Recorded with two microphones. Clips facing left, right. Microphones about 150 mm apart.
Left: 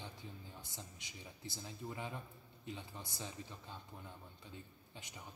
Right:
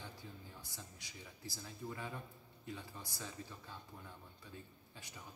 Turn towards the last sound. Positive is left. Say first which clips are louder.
# left 1 dB
turn(degrees=20)  # may be behind; listen again after turning